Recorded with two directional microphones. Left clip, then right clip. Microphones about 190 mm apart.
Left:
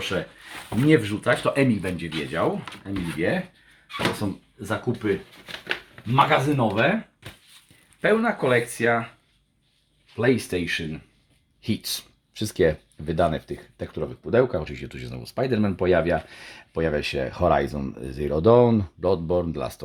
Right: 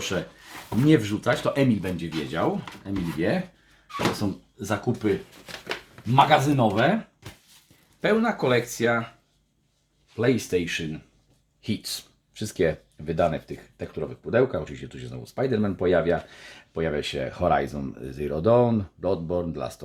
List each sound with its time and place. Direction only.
0.0 s speech: 10° right (ahead or behind)
4.7 s speech: 35° right (ahead or behind)
8.0 s speech: centre (ahead or behind)
10.2 s speech: 15° left (ahead or behind)
11.6 s speech: 30° left (ahead or behind)